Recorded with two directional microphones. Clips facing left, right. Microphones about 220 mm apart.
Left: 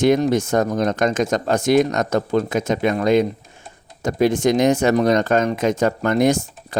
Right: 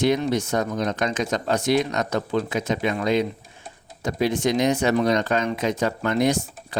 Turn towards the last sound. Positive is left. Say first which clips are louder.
# left 4 dB
turn(degrees=45)  # may be behind; listen again after turning